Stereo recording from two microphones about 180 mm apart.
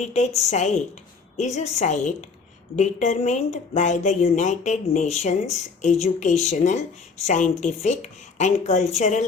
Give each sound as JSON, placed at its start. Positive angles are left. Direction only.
{"t": 0.0, "sound": "speech", "side_deg": 40}